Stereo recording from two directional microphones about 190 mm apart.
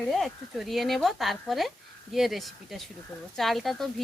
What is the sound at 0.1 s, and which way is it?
A woman's voice, centre (ahead or behind).